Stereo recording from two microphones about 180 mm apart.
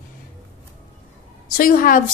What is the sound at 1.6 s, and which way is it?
Speech, 50° left (ahead or behind).